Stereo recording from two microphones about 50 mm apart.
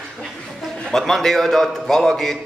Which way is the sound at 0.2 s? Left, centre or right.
Centre.